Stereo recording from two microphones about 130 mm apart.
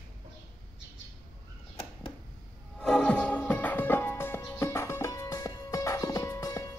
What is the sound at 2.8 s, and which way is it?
Music, 5° left (ahead or behind).